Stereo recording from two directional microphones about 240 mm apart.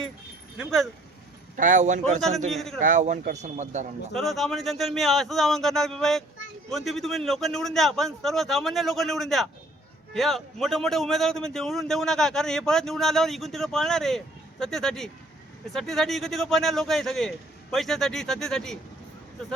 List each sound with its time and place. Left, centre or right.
0.6 s a man's voice: centre
1.5 s a man's voice: right
2.5 s a man's voice: centre
2.8 s speech: right
4.1 s a man's voice: centre